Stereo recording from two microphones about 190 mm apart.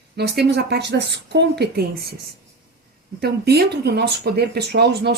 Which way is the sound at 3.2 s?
55° right (ahead or behind).